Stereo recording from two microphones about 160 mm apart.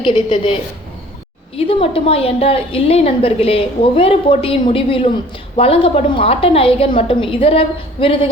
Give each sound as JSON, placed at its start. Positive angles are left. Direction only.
{"t": 0.0, "sound": "a woman's voice", "side_deg": 30}
{"t": 1.5, "sound": "a woman's voice", "side_deg": 35}